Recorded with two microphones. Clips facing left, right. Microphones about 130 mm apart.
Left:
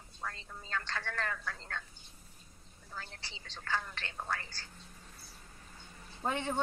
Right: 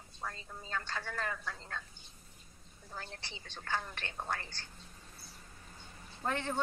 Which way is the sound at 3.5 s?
20° right (ahead or behind).